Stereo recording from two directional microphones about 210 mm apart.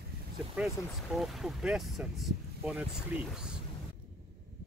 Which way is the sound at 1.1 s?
Centre (ahead or behind).